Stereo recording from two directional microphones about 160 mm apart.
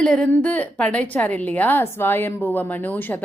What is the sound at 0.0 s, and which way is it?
A woman's voice, 5° left (ahead or behind).